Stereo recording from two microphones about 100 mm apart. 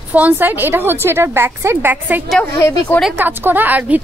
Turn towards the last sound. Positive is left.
turn(degrees=-15)  # may be behind; listen again after turning